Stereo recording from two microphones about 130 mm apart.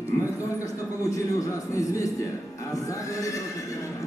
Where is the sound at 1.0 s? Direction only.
25° left (ahead or behind).